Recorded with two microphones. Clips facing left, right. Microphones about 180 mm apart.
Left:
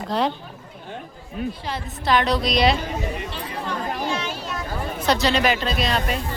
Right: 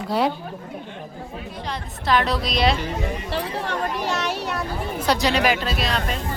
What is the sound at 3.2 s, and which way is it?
Speech, 70° right (ahead or behind).